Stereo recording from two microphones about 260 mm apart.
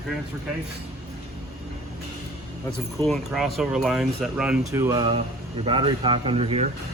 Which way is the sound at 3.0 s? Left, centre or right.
Centre.